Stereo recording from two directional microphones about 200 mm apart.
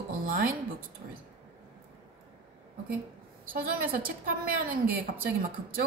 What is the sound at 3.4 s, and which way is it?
A woman's voice, 45° right (ahead or behind).